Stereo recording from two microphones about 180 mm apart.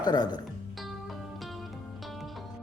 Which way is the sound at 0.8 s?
Centre (ahead or behind).